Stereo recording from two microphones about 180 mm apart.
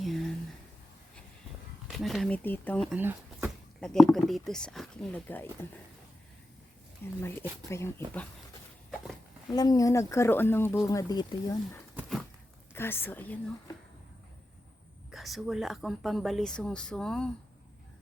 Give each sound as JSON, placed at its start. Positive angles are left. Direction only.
{"t": 0.0, "sound": "a sound", "side_deg": 0}
{"t": 1.9, "sound": "speech", "side_deg": 0}
{"t": 2.9, "sound": "a sound", "side_deg": -10}
{"t": 3.8, "sound": "speech", "side_deg": 5}
{"t": 7.0, "sound": "speech", "side_deg": 15}
{"t": 9.5, "sound": "speech", "side_deg": 20}
{"t": 15.1, "sound": "speech", "side_deg": 0}